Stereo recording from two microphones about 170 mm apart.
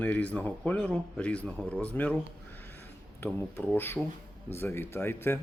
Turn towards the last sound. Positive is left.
turn(degrees=15)  # may be behind; listen again after turning